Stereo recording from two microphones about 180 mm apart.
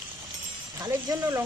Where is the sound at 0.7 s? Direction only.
15° right (ahead or behind).